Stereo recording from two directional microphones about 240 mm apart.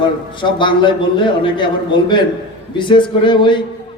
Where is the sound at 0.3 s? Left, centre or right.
Centre.